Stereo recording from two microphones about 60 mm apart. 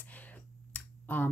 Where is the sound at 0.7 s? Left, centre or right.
Left.